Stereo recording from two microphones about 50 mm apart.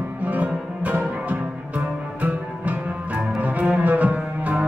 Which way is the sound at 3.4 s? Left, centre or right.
Right.